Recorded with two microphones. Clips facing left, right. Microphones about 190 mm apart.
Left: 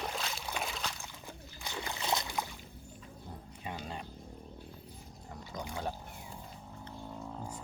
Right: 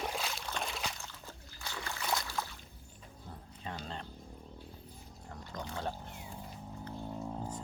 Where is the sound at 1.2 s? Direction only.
20° left (ahead or behind).